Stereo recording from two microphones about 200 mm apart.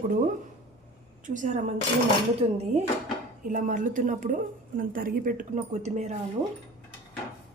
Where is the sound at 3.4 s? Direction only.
40° right (ahead or behind).